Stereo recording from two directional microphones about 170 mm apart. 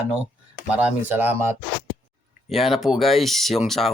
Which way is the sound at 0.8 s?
10° right (ahead or behind).